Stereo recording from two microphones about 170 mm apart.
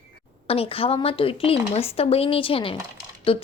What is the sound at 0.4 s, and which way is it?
A woman's voice, 35° left (ahead or behind).